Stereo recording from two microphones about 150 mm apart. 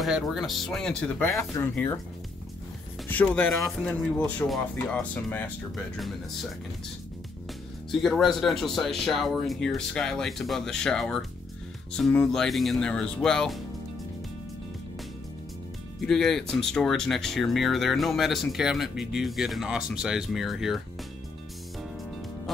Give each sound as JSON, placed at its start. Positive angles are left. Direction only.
{"t": 0.0, "sound": "speech", "side_deg": -5}
{"t": 1.3, "sound": "speech", "side_deg": 20}
{"t": 3.7, "sound": "speech", "side_deg": 5}
{"t": 7.9, "sound": "speech", "side_deg": 0}
{"t": 16.0, "sound": "speech", "side_deg": 0}